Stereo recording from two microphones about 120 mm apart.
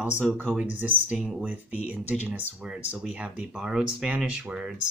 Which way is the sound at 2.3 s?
10° right (ahead or behind).